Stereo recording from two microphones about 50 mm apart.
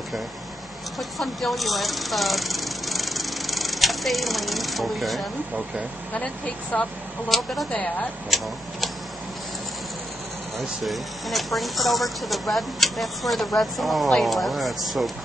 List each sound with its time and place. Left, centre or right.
0.9 s speech: centre
6.1 s speech: left
7.2 s speech: centre
10.8 s speech: centre